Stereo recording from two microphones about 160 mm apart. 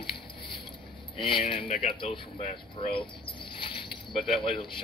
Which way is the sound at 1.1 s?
35° left (ahead or behind).